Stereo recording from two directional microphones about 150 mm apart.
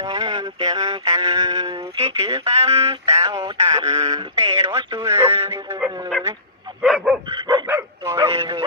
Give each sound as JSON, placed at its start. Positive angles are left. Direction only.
{"t": 0.0, "sound": "speech", "side_deg": -25}
{"t": 1.1, "sound": "music", "side_deg": -25}
{"t": 1.8, "sound": "speech", "side_deg": -45}
{"t": 3.2, "sound": "speech", "side_deg": -30}
{"t": 6.8, "sound": "dog", "side_deg": 0}
{"t": 7.4, "sound": "dog", "side_deg": -30}
{"t": 7.7, "sound": "bow-wow", "side_deg": -20}